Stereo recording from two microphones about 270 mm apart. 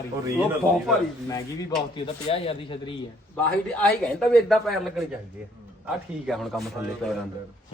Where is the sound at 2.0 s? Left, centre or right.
Left.